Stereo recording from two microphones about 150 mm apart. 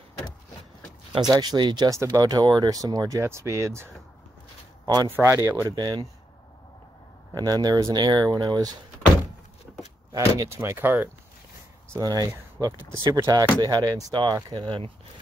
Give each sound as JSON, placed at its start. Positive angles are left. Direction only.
{"t": 1.1, "sound": "speech", "side_deg": -25}
{"t": 5.1, "sound": "speech", "side_deg": -20}
{"t": 7.3, "sound": "speech", "side_deg": -25}
{"t": 10.1, "sound": "speech", "side_deg": -20}
{"t": 11.9, "sound": "speech", "side_deg": -25}